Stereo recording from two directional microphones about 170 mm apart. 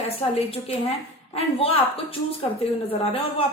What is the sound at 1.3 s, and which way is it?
A woman's voice, 35° left (ahead or behind).